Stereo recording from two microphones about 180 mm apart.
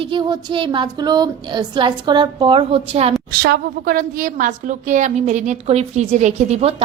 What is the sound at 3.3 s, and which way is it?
A woman's voice, 55° right (ahead or behind).